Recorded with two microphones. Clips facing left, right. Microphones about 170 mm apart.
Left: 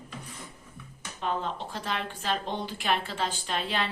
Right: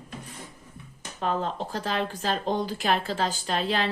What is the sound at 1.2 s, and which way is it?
A woman's voice, 40° right (ahead or behind).